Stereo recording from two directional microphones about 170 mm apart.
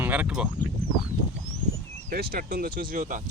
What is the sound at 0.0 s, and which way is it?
Speech, 10° right (ahead or behind).